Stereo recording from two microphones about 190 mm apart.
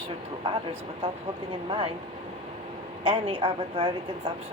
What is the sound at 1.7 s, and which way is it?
Speech, 30° right (ahead or behind).